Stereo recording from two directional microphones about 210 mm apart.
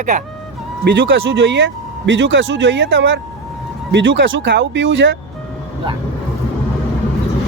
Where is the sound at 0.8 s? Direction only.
60° right (ahead or behind).